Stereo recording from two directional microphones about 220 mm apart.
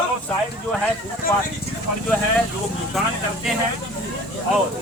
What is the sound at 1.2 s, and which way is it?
Speech, 40° left (ahead or behind).